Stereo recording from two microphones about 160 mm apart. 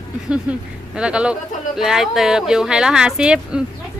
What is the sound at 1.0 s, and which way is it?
A woman's voice, 5° right (ahead or behind).